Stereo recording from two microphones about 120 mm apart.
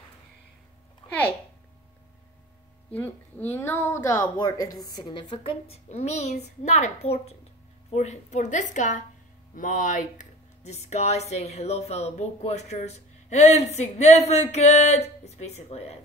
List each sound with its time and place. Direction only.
2.9 s a woman's voice: 15° left (ahead or behind); by 7.3 s 60° left (ahead or behind)
7.9 s a woman's voice: 70° left (ahead or behind)